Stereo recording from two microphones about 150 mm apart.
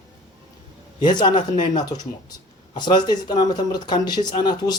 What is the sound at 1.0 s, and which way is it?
Speech, 30° left (ahead or behind).